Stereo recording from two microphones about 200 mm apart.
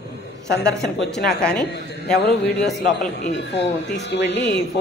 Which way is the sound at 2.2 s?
55° left (ahead or behind).